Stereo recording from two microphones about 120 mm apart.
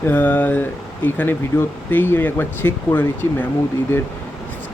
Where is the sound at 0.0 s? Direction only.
15° left (ahead or behind).